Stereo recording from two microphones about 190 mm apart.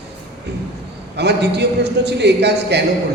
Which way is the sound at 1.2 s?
60° right (ahead or behind).